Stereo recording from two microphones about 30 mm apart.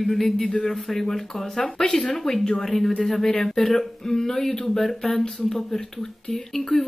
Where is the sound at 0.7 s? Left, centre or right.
Centre.